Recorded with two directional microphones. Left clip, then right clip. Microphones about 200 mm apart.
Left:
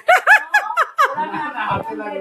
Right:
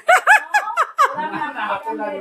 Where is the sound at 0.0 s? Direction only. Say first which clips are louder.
Left 1 dB; 15° left (ahead or behind).